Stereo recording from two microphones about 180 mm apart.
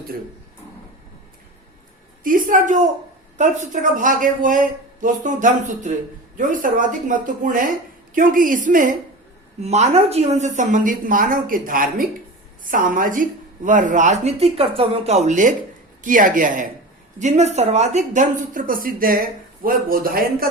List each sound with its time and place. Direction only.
2.2 s speech: 45° right (ahead or behind)